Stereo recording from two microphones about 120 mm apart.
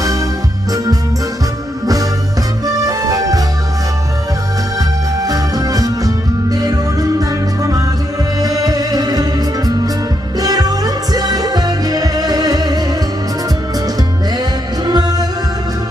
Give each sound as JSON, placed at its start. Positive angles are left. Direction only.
{"t": 0.0, "sound": "music", "side_deg": -25}
{"t": 2.6, "sound": "music", "side_deg": -30}
{"t": 5.2, "sound": "music", "side_deg": -30}
{"t": 14.8, "sound": "music", "side_deg": -35}